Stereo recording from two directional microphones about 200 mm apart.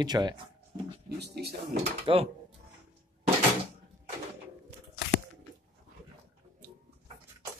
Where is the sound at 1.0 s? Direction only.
55° right (ahead or behind).